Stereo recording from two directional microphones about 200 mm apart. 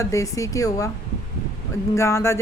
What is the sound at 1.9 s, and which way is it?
Speech, 15° left (ahead or behind).